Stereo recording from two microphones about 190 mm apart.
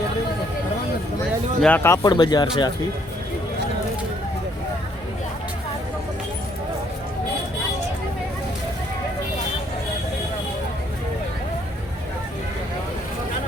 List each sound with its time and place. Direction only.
1.6 s speech: 10° left (ahead or behind)